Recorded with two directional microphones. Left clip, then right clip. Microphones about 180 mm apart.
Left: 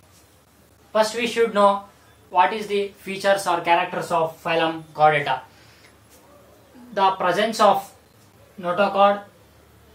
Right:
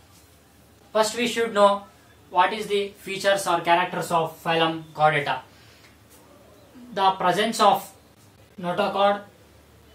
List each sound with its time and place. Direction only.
0.9 s speech: 15° left (ahead or behind)
6.9 s speech: 10° left (ahead or behind)